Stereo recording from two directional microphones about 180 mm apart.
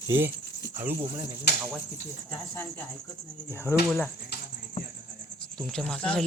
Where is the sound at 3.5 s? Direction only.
15° left (ahead or behind).